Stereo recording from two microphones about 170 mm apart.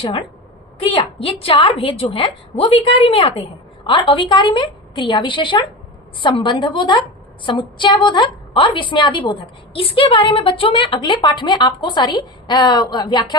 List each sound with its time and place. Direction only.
0.0 s a woman's voice: 30° left (ahead or behind)